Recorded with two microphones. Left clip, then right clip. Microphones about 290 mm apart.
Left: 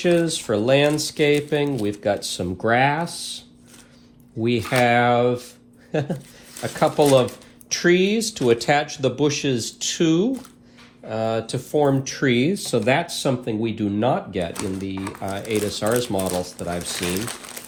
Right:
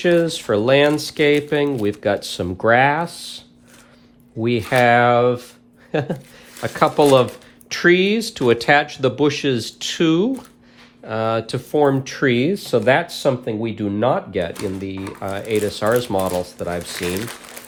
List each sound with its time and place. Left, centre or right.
0.0 s speech: right